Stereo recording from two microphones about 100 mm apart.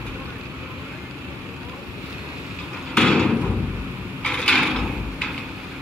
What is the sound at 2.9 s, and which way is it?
Thump, 5° left (ahead or behind).